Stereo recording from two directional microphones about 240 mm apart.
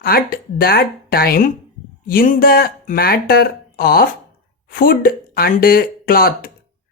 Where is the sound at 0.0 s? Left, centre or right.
Left.